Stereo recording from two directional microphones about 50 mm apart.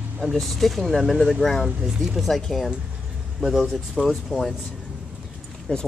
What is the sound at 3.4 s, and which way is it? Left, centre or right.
Speech, centre.